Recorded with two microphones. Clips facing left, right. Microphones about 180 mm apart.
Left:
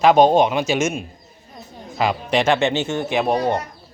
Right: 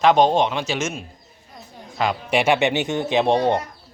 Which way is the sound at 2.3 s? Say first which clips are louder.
Even; 10° right (ahead or behind).